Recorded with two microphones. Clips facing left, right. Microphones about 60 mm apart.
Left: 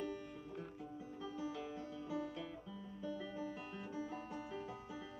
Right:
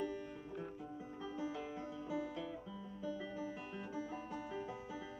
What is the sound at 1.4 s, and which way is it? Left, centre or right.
Music, centre.